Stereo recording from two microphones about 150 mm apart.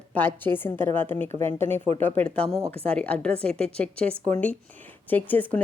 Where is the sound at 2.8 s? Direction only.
10° left (ahead or behind).